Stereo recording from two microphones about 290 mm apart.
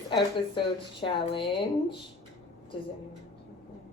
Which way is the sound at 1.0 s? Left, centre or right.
Centre.